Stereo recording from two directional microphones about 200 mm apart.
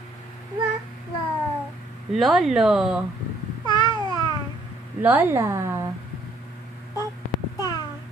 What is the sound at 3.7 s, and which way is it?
Babbling, 20° left (ahead or behind).